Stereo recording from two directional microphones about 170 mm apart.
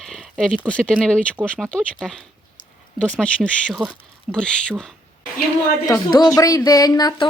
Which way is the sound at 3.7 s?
5° right (ahead or behind).